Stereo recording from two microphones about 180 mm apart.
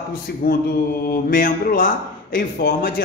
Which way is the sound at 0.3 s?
60° left (ahead or behind).